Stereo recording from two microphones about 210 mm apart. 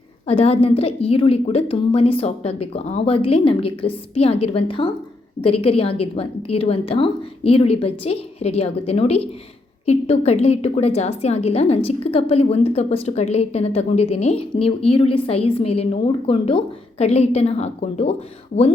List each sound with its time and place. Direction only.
0.3 s a woman's voice: 30° left (ahead or behind)